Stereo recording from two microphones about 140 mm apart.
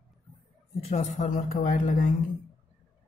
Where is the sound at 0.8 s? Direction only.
55° left (ahead or behind).